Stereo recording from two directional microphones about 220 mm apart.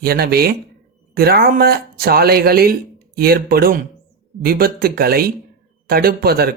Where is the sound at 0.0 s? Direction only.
45° right (ahead or behind).